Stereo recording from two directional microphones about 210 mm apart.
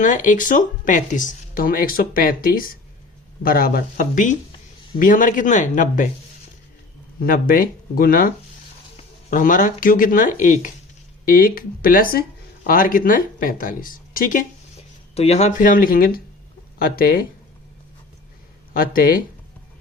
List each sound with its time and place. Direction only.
0.0 s speech: 35° left (ahead or behind)
7.2 s speech: 45° left (ahead or behind)
15.1 s speech: 30° left (ahead or behind)
18.7 s speech: 45° left (ahead or behind)